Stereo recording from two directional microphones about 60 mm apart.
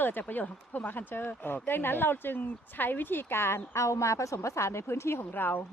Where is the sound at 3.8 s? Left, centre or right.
Left.